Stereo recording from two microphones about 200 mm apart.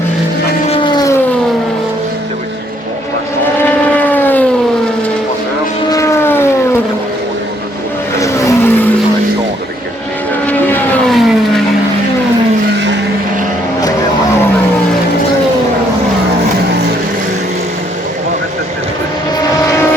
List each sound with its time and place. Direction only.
0.7 s vehicle: 20° left (ahead or behind)
3.6 s vehicle: 10° left (ahead or behind)
5.9 s vehicle: 15° left (ahead or behind)
8.2 s vehicle: 15° left (ahead or behind)
10.4 s vehicle: 5° left (ahead or behind)